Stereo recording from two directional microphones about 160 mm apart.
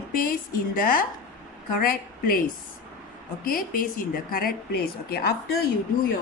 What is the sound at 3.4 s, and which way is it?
Speech, 60° left (ahead or behind).